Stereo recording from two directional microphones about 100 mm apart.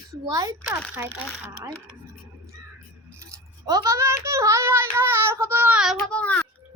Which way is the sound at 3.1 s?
25° right (ahead or behind).